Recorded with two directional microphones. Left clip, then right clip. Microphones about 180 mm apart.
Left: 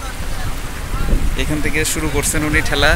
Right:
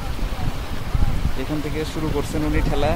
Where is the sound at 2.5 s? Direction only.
Centre (ahead or behind).